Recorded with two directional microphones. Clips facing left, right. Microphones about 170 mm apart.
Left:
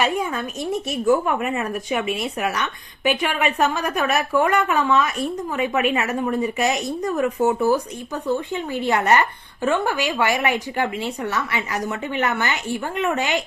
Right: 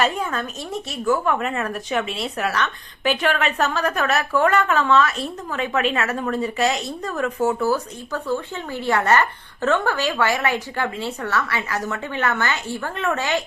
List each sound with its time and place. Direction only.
0.0 s speech: 10° left (ahead or behind)